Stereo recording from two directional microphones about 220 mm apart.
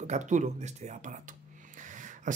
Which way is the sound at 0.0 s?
35° right (ahead or behind).